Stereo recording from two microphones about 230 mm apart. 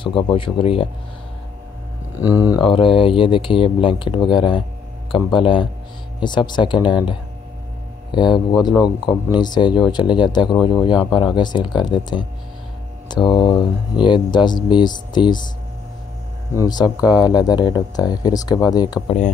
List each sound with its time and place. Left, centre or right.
0.0 s speech: left
2.3 s speech: centre
8.1 s speech: centre
16.5 s speech: centre
19.0 s speech: left